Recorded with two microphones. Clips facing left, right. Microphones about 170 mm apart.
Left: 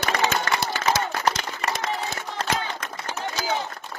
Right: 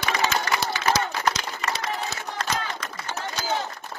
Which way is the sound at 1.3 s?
50° left (ahead or behind).